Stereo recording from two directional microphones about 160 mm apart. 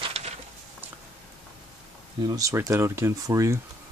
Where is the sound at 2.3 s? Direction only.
20° right (ahead or behind).